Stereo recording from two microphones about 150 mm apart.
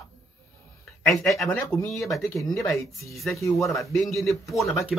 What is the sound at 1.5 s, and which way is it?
Speech, 10° left (ahead or behind).